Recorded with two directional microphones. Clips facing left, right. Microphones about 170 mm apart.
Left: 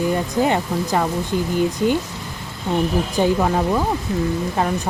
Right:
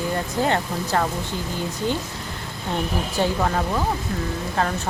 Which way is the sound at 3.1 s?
15° left (ahead or behind).